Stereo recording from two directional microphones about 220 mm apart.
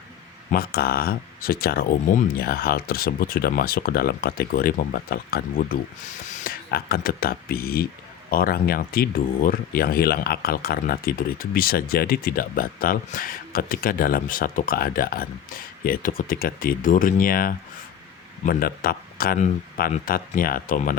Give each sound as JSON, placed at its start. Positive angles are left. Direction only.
{"t": 0.5, "sound": "speech", "side_deg": 45}